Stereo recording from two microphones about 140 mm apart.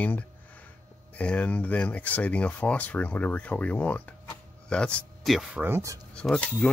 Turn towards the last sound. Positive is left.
turn(degrees=5)  # may be behind; listen again after turning